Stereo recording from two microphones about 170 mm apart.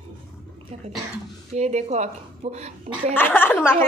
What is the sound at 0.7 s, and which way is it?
Speech, 40° right (ahead or behind).